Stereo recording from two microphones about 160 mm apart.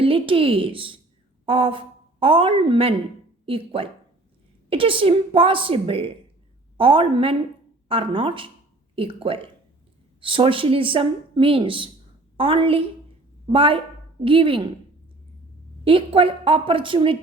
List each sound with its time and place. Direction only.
0.0 s a woman's voice: 35° right (ahead or behind)
15.8 s speech: 35° right (ahead or behind)